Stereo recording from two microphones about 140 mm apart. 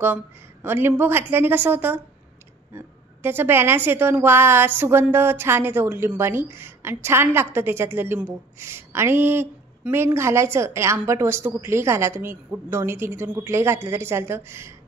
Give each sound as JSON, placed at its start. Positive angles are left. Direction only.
{"t": 0.0, "sound": "a woman's voice", "side_deg": -15}